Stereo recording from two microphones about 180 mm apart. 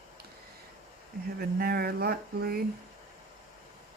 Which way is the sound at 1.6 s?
60° right (ahead or behind).